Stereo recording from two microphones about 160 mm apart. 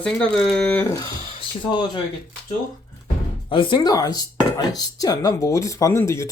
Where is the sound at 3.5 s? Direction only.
30° left (ahead or behind).